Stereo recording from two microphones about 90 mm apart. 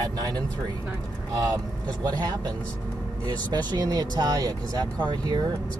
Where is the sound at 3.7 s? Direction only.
45° right (ahead or behind).